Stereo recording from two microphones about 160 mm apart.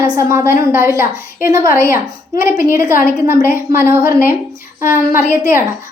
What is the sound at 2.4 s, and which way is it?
A woman's voice, 15° right (ahead or behind).